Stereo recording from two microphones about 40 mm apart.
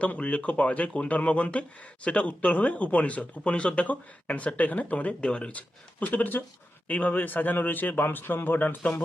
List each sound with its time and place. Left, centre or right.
0.2 s speech: left
5.5 s a man's voice: left